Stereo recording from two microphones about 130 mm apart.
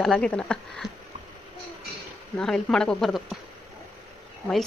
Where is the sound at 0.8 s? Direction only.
25° left (ahead or behind).